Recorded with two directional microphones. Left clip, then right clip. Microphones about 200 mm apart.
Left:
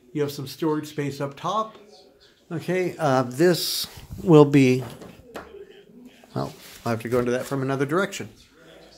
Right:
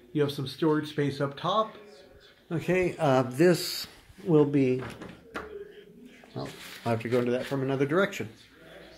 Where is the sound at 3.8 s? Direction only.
40° left (ahead or behind).